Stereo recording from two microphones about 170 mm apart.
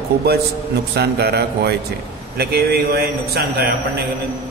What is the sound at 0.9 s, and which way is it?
A man's voice, 70° right (ahead or behind).